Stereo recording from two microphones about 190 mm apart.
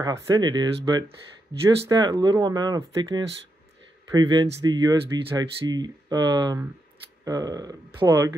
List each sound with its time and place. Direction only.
0.0 s speech: 20° right (ahead or behind)
1.9 s speech: 20° right (ahead or behind)